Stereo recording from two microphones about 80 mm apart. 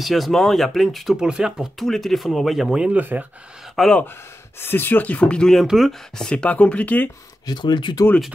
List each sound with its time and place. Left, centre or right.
0.0 s speech: centre
1.9 s speech: centre; by 3.3 s right
3.7 s speech: centre
4.6 s speech: left
7.4 s speech: left